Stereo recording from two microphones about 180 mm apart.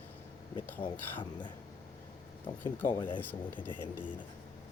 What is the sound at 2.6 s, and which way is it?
Speech, 10° left (ahead or behind).